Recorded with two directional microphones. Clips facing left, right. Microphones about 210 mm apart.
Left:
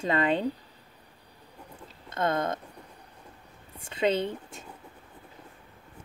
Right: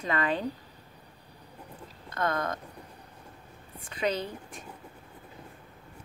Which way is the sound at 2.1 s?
25° left (ahead or behind).